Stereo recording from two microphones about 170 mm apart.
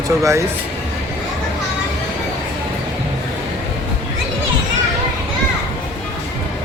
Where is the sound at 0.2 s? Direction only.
15° right (ahead or behind).